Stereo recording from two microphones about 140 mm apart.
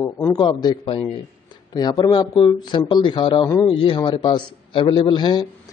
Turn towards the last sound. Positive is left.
turn(degrees=35)  # may be behind; listen again after turning